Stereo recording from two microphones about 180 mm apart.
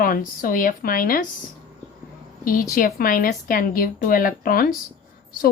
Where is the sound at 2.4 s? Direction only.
50° left (ahead or behind).